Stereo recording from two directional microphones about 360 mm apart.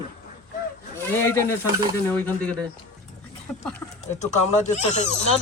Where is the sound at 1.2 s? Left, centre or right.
Centre.